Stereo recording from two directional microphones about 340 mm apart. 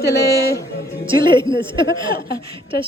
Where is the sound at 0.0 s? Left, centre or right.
Centre.